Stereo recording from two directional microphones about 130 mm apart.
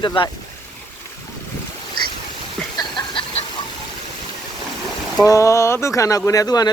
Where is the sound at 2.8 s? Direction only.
35° left (ahead or behind).